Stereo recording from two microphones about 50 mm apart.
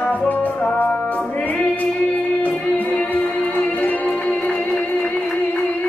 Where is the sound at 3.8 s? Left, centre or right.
Left.